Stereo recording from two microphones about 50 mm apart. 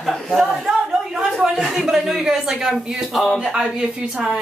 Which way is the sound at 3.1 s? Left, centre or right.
Centre.